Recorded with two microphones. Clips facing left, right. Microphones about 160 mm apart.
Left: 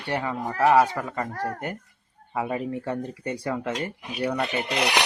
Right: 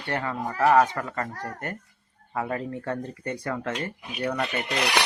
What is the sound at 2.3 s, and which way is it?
Speech, 15° left (ahead or behind).